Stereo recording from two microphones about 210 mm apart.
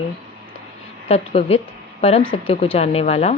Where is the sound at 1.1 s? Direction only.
30° left (ahead or behind).